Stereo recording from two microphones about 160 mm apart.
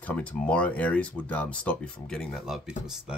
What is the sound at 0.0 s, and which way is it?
Speech, 10° left (ahead or behind).